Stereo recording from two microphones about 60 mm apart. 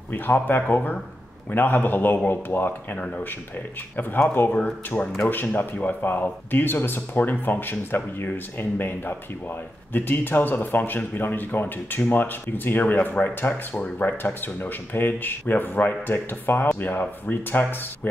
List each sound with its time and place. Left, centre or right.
0.1 s speech: left
3.0 s speech: left
3.9 s speech: left
13.8 s speech: left
14.1 s speech: left